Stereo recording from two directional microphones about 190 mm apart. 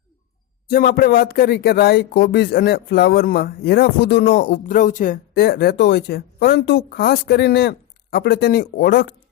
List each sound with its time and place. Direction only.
0.7 s speech: 50° left (ahead or behind)